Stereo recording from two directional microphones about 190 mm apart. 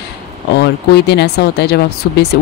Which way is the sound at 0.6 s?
60° left (ahead or behind).